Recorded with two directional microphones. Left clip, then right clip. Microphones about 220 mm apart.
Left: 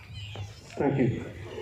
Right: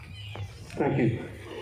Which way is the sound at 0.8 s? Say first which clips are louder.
Even; 40° right (ahead or behind).